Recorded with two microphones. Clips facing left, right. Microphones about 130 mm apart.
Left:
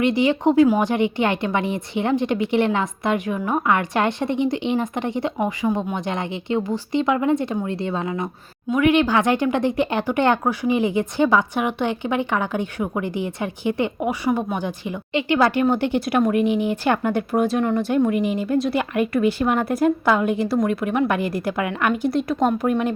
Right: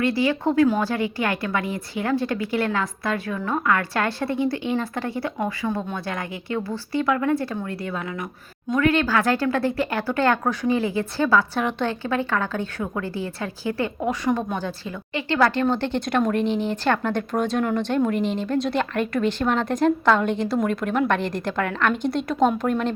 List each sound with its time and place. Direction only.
0.0 s a woman's voice: 20° left (ahead or behind)